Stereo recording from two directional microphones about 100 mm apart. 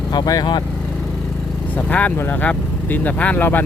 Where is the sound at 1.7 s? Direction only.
15° left (ahead or behind).